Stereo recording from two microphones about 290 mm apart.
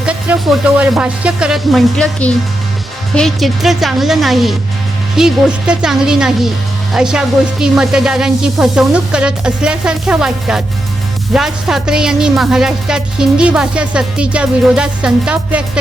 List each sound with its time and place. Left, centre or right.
0.0 s speech: centre